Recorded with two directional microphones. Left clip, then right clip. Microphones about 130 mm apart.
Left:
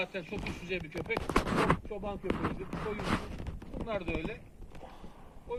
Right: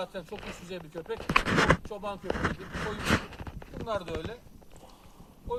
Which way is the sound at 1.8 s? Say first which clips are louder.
Right 2 dB; 35° right (ahead or behind).